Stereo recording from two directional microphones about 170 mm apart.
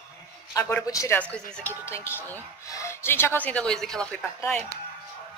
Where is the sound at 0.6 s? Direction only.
15° left (ahead or behind).